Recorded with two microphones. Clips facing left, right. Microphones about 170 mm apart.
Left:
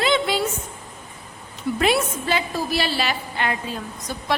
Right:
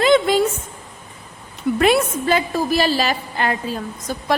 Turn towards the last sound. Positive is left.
turn(degrees=-40)  # may be behind; listen again after turning